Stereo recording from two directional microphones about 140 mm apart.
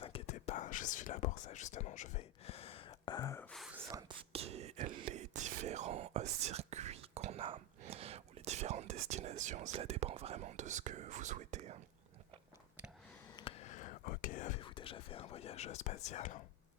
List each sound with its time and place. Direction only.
0.0 s whispering: 45° left (ahead or behind)
3.2 s whispering: 20° left (ahead or behind)
3.4 s whispering: 5° left (ahead or behind)
4.3 s whispering: 45° right (ahead or behind)
13.6 s whispering: 60° left (ahead or behind)
14.6 s whispering: 40° left (ahead or behind); by 16.4 s 60° left (ahead or behind)